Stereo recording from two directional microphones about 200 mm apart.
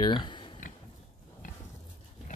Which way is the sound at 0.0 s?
25° left (ahead or behind).